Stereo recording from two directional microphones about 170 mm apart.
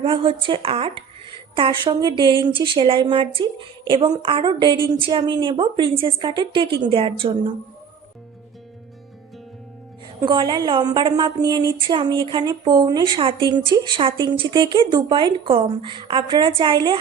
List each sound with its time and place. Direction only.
0.0 s speech: 30° right (ahead or behind)
10.2 s speech: 25° right (ahead or behind)